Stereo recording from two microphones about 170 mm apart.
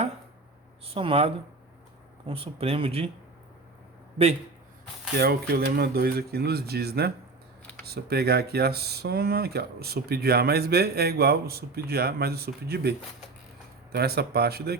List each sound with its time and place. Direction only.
0.9 s speech: 35° right (ahead or behind)
5.1 s speech: 65° right (ahead or behind)
13.9 s speech: 70° right (ahead or behind)